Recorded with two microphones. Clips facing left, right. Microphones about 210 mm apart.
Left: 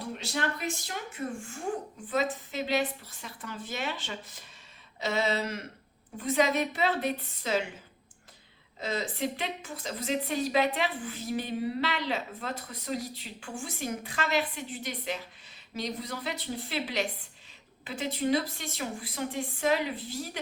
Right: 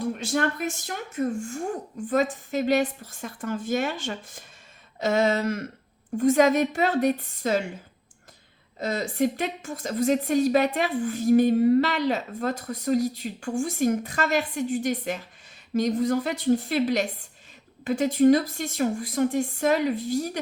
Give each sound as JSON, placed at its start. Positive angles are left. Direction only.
{"t": 0.0, "sound": "a woman's voice", "side_deg": -50}
{"t": 8.8, "sound": "a woman's voice", "side_deg": -45}